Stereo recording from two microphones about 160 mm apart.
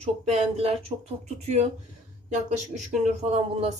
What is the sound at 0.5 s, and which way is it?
Speech, 40° right (ahead or behind).